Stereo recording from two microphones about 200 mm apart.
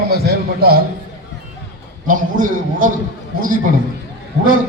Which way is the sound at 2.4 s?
40° right (ahead or behind).